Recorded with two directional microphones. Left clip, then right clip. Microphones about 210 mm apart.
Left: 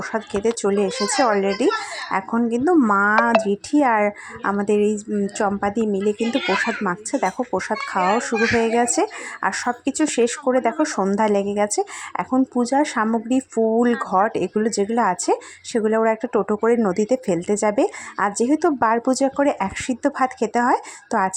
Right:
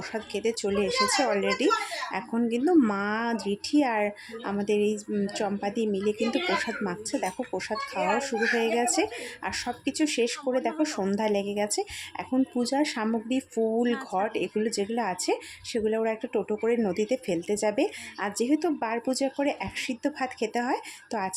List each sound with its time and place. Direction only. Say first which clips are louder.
0.0 s speech: left 8 dB; 15° left (ahead or behind)
2.6 s a woman's voice: left 8 dB; centre (ahead or behind)
3.4 s speech: left 7 dB; 15° left (ahead or behind)
4.0 s a woman's voice: left 9 dB; 5° left (ahead or behind)
4.7 s speech: left 4 dB; 20° left (ahead or behind)